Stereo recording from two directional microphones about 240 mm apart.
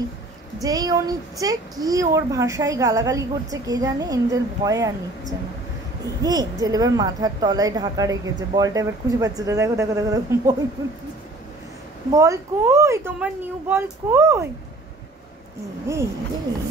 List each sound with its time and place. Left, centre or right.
0.6 s a woman's voice: centre
12.1 s a woman's voice: centre
15.9 s a woman's voice: centre